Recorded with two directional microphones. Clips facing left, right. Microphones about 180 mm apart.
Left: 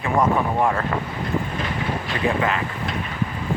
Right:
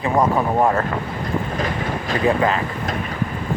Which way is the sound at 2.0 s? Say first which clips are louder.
Right 5 dB; 40° right (ahead or behind).